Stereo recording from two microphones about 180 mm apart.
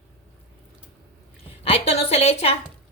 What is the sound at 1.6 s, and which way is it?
Speech, 35° left (ahead or behind).